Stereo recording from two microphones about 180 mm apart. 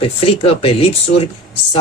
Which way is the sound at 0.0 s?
30° left (ahead or behind).